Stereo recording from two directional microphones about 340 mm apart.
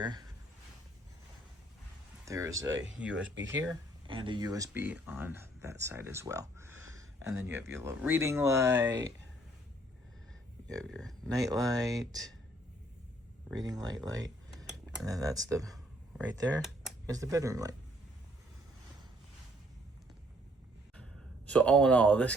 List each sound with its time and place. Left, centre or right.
0.0 s speech: centre
2.2 s speech: centre
2.6 s speech: right
4.0 s speech: centre
6.9 s a sound: centre
7.5 s speech: centre
10.8 s speech: centre
11.3 s speech: centre
13.6 s speech: centre
21.4 s speech: centre